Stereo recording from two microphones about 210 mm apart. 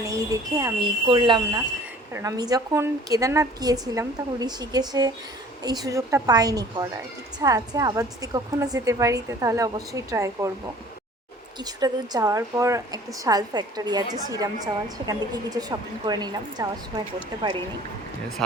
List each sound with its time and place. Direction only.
0.0 s a woman's voice: 15° right (ahead or behind)
11.6 s a woman's voice: 20° right (ahead or behind)